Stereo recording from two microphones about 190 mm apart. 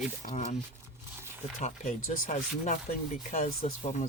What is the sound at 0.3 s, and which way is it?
Speech, 40° left (ahead or behind).